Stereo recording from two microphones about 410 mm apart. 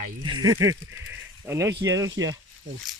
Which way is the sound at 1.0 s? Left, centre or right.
Centre.